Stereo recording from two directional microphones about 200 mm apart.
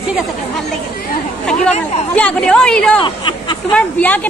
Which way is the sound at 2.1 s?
5° left (ahead or behind).